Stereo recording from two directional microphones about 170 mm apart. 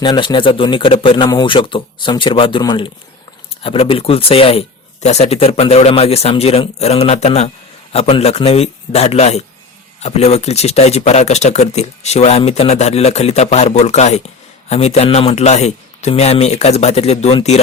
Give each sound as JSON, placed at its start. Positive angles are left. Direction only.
{"t": 0.0, "sound": "a man's voice", "side_deg": 25}